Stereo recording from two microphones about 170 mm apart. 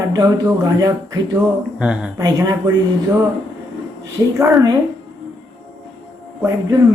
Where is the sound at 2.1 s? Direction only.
20° right (ahead or behind).